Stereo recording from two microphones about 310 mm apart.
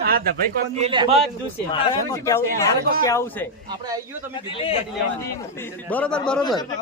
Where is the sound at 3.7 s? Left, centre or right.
Centre.